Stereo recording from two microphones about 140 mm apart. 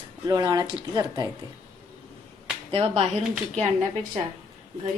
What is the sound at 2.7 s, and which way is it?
Speech, 45° right (ahead or behind).